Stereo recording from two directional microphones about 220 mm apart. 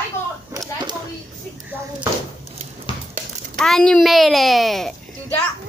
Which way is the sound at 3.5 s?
Centre (ahead or behind).